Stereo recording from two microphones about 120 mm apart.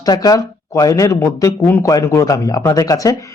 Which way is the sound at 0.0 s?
30° left (ahead or behind).